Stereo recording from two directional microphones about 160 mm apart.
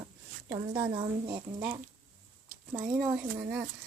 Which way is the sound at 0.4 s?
20° right (ahead or behind).